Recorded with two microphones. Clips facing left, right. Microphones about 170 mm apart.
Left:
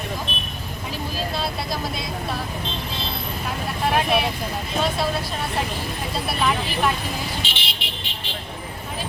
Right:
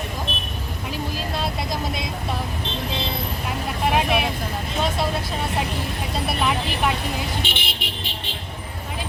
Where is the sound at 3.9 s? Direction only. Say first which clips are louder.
Left 1 dB; 15° right (ahead or behind).